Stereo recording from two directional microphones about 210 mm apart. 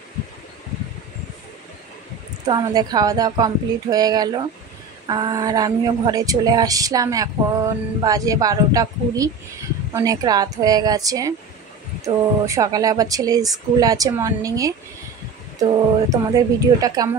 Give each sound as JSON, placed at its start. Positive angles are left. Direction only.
{"t": 2.4, "sound": "a woman's voice", "side_deg": -20}
{"t": 12.4, "sound": "a woman's voice", "side_deg": -15}
{"t": 16.1, "sound": "a woman's voice", "side_deg": -15}